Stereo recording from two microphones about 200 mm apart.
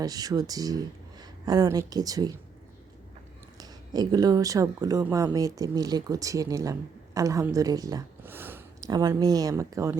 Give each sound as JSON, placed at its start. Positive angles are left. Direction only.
{"t": 0.0, "sound": "speech", "side_deg": -20}
{"t": 3.6, "sound": "speech", "side_deg": -20}